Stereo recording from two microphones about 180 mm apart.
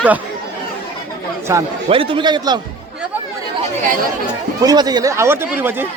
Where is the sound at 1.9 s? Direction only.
30° right (ahead or behind).